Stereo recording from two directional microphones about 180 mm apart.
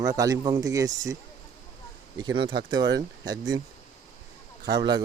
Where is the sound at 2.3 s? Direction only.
25° right (ahead or behind).